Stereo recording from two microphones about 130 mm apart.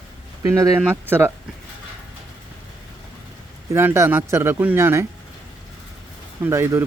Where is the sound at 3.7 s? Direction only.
20° right (ahead or behind).